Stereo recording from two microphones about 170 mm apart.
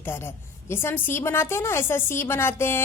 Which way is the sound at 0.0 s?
15° left (ahead or behind).